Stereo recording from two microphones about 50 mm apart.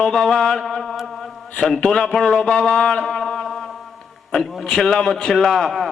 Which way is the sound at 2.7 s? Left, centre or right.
Centre.